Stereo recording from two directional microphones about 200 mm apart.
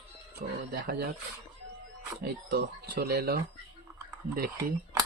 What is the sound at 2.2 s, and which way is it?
Speech, 50° right (ahead or behind).